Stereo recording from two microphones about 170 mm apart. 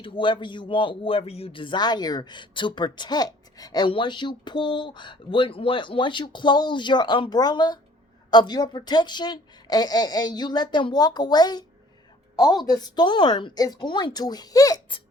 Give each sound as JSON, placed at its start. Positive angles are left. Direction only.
{"t": 0.0, "sound": "speech", "side_deg": 30}